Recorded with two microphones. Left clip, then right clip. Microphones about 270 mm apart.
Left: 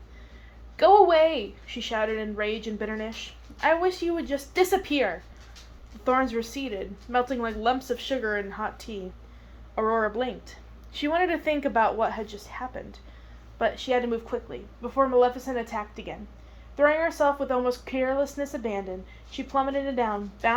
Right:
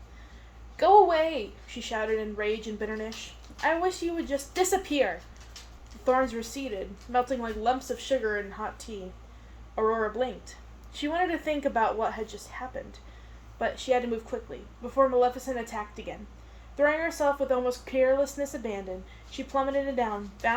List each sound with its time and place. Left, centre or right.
0.8 s a woman's voice: centre
6.1 s a woman's voice: centre
9.7 s a woman's voice: left